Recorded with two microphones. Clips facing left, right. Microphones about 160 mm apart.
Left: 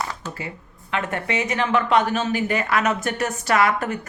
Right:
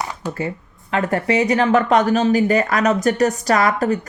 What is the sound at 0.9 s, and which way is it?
A woman's voice, 35° right (ahead or behind).